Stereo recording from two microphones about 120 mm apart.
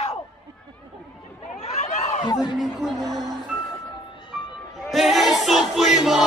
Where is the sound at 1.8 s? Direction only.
70° left (ahead or behind).